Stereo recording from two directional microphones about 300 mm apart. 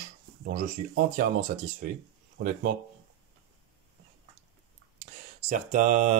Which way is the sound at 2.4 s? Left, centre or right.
Right.